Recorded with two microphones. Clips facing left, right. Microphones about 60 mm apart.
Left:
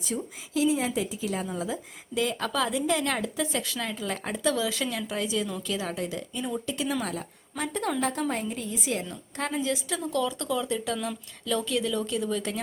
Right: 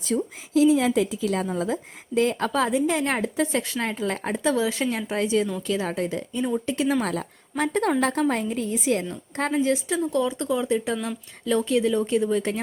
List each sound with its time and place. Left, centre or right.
0.1 s a woman's voice: right
0.8 s a woman's voice: right
1.5 s a woman's voice: right
10.1 s a woman's voice: right